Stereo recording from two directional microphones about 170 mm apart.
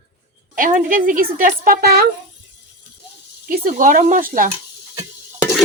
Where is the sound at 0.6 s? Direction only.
50° right (ahead or behind).